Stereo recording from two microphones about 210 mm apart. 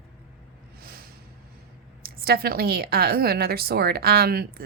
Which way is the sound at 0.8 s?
45° right (ahead or behind).